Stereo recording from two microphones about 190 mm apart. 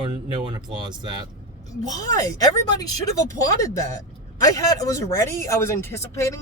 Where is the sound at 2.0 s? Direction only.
20° left (ahead or behind).